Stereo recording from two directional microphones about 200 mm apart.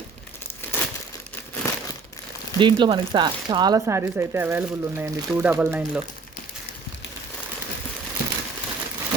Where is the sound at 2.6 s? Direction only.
25° right (ahead or behind).